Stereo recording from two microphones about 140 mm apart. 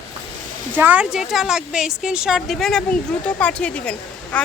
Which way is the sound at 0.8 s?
10° right (ahead or behind).